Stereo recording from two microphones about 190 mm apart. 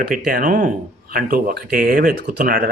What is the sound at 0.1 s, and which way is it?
Speech, 45° right (ahead or behind).